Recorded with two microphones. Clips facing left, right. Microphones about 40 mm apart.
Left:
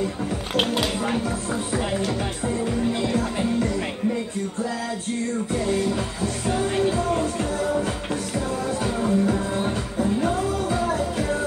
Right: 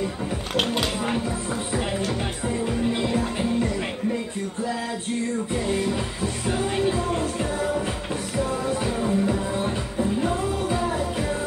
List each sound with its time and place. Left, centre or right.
1.8 s music: centre
2.9 s music: right
6.4 s music: centre
8.8 s music: centre
10.8 s music: centre